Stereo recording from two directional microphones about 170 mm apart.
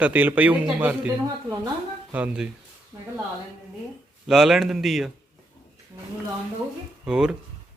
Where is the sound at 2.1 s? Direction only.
10° right (ahead or behind).